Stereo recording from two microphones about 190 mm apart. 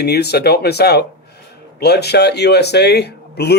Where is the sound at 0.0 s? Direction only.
60° left (ahead or behind).